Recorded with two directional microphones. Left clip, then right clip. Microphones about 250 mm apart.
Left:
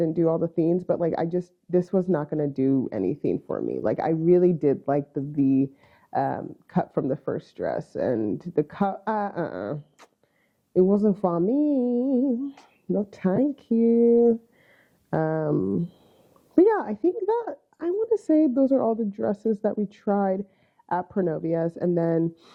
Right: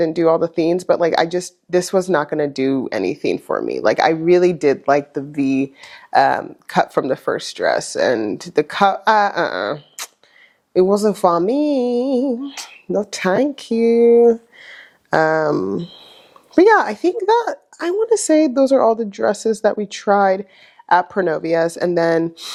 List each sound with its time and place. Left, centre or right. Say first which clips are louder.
0.0 s speech: right 8 dB; centre
12.2 s speech: right 5 dB; right
12.5 s speech: right 7 dB; centre
15.4 s speech: right 8 dB; right
16.6 s speech: right 8 dB; centre
18.8 s speech: right 10 dB; right
19.1 s speech: right 8 dB; centre